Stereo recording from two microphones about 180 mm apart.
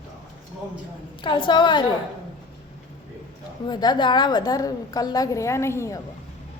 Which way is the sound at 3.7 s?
25° left (ahead or behind).